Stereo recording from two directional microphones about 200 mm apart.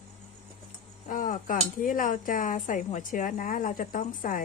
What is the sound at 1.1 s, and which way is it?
Speech, 40° left (ahead or behind).